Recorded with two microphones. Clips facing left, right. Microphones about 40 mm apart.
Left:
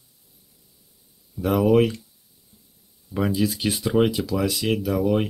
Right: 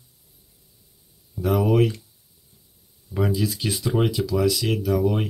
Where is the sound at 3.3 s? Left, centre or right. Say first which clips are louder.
Left 2 dB; left.